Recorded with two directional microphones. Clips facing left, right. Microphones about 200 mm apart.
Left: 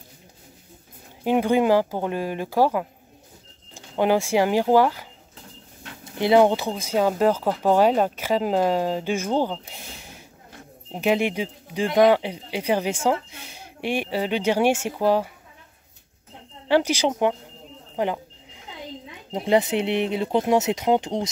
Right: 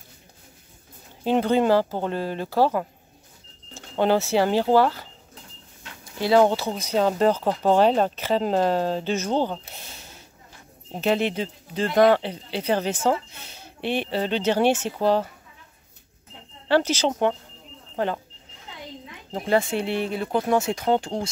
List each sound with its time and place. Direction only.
1.2 s speech: 15° left (ahead or behind)
10.9 s speech: 15° left (ahead or behind)
16.6 s speech: 15° left (ahead or behind)
18.7 s a sound: 15° left (ahead or behind)
19.3 s speech: 20° left (ahead or behind)